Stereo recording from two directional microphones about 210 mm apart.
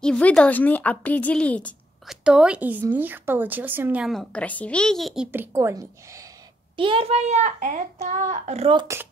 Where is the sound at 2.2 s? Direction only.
5° right (ahead or behind); by 8.8 s 30° right (ahead or behind).